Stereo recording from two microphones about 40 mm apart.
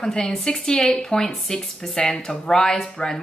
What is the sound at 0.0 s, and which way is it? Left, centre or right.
A woman's voice, centre.